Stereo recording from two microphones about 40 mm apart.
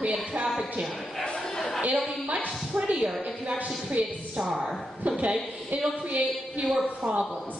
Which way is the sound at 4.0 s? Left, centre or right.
Right.